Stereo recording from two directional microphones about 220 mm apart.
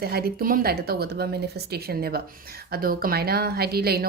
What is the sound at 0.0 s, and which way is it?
Speech, 45° right (ahead or behind).